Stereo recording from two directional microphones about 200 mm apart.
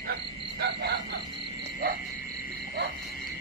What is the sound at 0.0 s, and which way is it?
Frog, 55° right (ahead or behind).